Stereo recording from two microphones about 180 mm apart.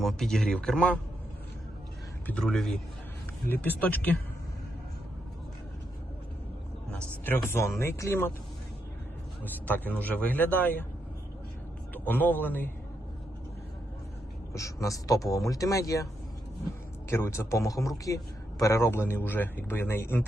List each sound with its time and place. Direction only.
0.0 s speech: centre (ahead or behind)
2.2 s speech: 5° left (ahead or behind)
6.9 s speech: 10° left (ahead or behind)
9.6 s speech: 10° left (ahead or behind)
11.9 s speech: 10° left (ahead or behind)
14.5 s speech: 15° left (ahead or behind)
17.1 s speech: 15° left (ahead or behind)